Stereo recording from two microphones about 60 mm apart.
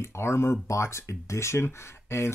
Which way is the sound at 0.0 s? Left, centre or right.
Left.